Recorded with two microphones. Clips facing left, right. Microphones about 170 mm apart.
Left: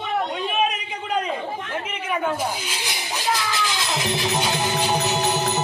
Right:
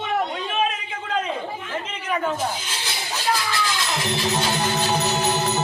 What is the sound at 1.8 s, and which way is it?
Music, 10° left (ahead or behind).